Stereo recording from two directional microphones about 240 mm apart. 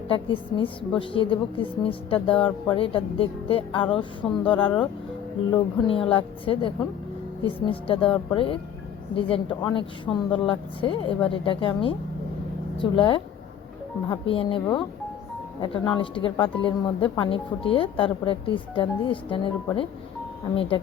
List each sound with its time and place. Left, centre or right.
0.1 s a woman's voice: left